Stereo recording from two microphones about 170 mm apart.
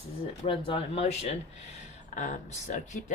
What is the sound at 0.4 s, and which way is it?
Speech, 30° left (ahead or behind).